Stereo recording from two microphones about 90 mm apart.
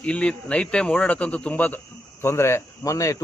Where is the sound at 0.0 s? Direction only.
10° left (ahead or behind).